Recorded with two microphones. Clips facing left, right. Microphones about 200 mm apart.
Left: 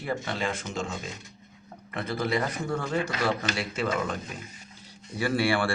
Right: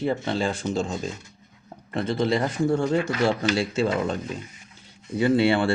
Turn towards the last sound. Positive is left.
turn(degrees=-20)  # may be behind; listen again after turning